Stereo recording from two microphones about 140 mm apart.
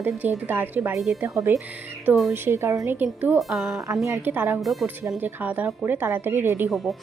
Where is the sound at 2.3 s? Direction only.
15° right (ahead or behind).